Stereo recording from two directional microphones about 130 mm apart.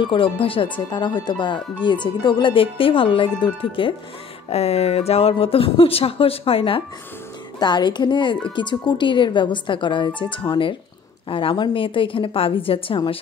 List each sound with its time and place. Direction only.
0.0 s speech: 40° left (ahead or behind)
4.5 s speech: 50° left (ahead or behind)
7.5 s speech: 35° left (ahead or behind)